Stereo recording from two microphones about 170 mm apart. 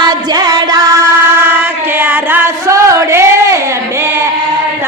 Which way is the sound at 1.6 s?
10° right (ahead or behind).